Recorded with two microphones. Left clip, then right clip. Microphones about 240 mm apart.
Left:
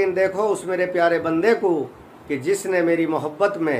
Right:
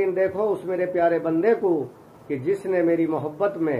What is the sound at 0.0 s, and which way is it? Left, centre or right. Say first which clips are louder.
A man's voice: left 2 dB; centre.